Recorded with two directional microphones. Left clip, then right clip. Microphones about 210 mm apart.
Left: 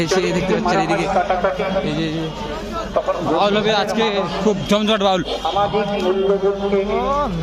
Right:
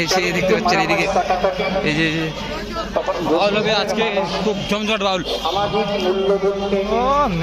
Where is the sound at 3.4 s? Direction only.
50° left (ahead or behind).